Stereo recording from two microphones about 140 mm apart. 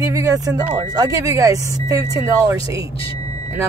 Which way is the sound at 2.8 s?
40° left (ahead or behind).